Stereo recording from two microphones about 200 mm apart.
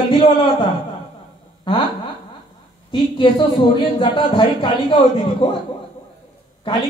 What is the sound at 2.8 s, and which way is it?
Speech, 25° left (ahead or behind).